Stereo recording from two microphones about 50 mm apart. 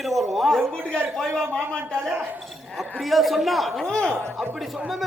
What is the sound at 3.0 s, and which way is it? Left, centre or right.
Speech, centre.